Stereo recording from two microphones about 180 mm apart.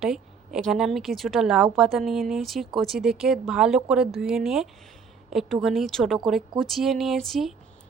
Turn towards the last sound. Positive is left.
turn(degrees=0)  # may be behind; listen again after turning